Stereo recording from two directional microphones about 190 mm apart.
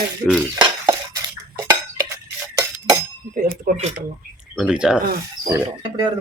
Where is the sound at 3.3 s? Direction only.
45° right (ahead or behind).